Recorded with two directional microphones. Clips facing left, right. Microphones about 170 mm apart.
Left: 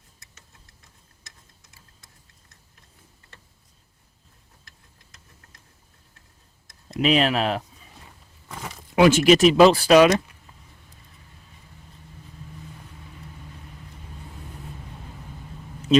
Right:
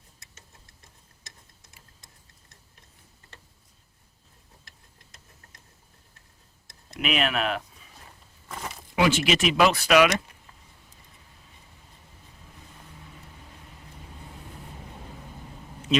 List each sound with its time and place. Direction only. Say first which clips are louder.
7.0 s speech: left 6 dB; 30° left (ahead or behind)
9.0 s speech: left 8 dB; 45° left (ahead or behind)